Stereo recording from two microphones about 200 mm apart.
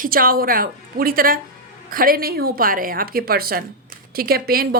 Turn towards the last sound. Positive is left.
turn(degrees=-50)  # may be behind; listen again after turning